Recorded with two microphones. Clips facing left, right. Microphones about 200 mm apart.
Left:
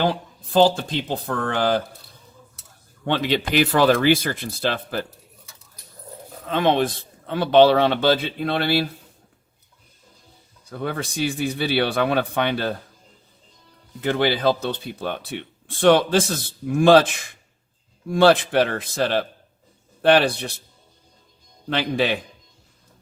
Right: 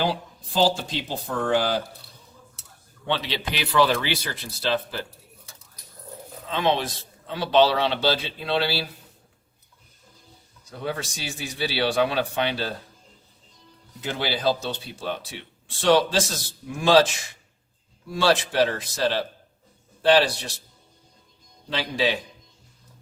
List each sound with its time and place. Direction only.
0.0 s a man's voice: 55° left (ahead or behind)
3.1 s a man's voice: 50° left (ahead or behind)
6.4 s a man's voice: 50° left (ahead or behind)
10.7 s a man's voice: 55° left (ahead or behind)
14.0 s a man's voice: 55° left (ahead or behind)
21.7 s a man's voice: 55° left (ahead or behind)